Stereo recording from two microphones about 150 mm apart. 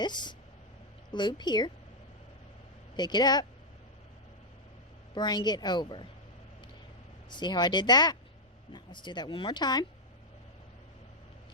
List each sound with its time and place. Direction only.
0.0 s speech: 30° left (ahead or behind)
2.9 s speech: 30° left (ahead or behind)
5.1 s speech: 30° left (ahead or behind)
7.3 s speech: 30° left (ahead or behind)